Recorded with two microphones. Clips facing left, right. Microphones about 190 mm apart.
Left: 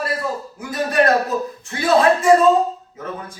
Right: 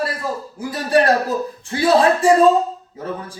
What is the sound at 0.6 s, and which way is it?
A man's voice, 30° right (ahead or behind).